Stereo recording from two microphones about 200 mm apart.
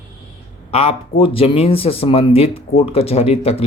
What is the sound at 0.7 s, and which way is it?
Speech, 30° left (ahead or behind).